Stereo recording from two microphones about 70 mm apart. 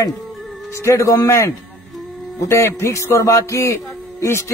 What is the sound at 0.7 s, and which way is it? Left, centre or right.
A man's voice, left.